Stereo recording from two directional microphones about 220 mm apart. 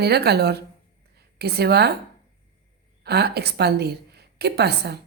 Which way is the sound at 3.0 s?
45° right (ahead or behind).